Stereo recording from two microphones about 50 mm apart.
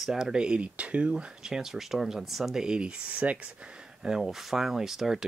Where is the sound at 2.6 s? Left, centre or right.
Centre.